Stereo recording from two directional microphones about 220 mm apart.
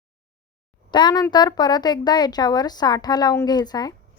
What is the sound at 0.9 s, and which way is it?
Speech, 20° left (ahead or behind).